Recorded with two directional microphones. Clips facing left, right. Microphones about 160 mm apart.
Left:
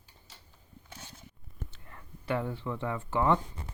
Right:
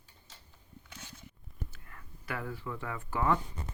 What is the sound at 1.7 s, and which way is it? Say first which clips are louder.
Speech: left 3 dB; 25° left (ahead or behind).